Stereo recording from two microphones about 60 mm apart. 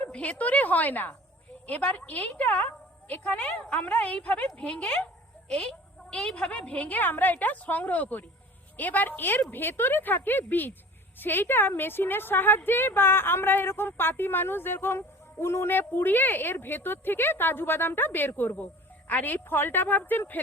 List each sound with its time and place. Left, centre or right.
0.0 s a woman's voice: left